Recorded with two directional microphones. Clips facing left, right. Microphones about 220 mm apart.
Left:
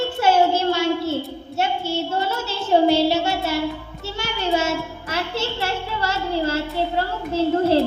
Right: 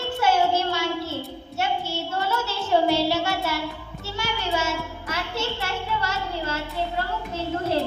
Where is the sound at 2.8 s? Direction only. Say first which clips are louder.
Left 5 dB; 25° left (ahead or behind).